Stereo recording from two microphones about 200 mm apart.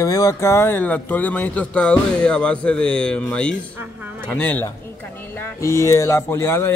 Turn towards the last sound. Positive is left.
turn(degrees=10)  # may be behind; listen again after turning